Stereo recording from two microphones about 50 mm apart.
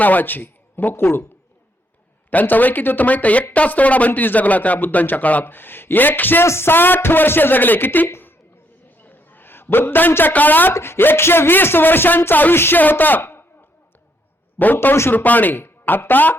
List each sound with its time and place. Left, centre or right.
0.0 s speech: left
2.3 s speech: left
5.5 s speech: left
6.4 s speech: left
6.7 s speech: left
8.9 s a sound: left
10.3 s speech: left
10.7 s speech: left
14.6 s speech: left